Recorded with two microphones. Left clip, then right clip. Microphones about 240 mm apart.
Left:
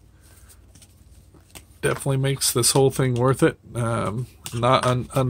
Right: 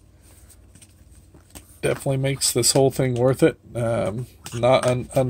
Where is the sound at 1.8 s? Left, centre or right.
Centre.